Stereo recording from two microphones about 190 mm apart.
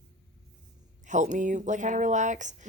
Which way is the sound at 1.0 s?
40° right (ahead or behind).